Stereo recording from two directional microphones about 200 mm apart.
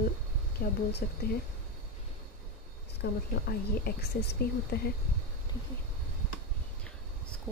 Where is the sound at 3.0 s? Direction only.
50° left (ahead or behind).